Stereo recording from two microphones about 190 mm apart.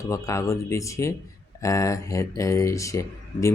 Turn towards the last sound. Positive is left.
turn(degrees=15)  # may be behind; listen again after turning